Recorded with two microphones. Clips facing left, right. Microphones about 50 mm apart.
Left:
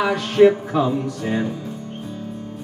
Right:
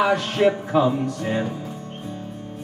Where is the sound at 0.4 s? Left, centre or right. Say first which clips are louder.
Left 6 dB; centre.